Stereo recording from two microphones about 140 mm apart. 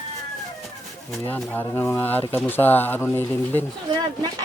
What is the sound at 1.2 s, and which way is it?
Speech, 15° left (ahead or behind).